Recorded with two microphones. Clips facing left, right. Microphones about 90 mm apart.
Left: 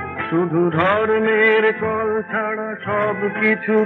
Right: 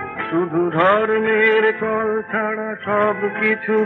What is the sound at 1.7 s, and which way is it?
Music, centre (ahead or behind).